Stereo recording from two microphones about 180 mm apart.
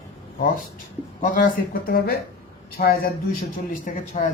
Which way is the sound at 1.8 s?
55° left (ahead or behind).